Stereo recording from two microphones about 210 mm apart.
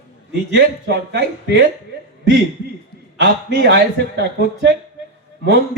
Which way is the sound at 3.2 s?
55° right (ahead or behind).